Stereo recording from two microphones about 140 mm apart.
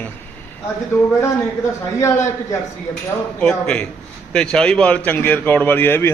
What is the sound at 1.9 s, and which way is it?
Speech, 20° left (ahead or behind).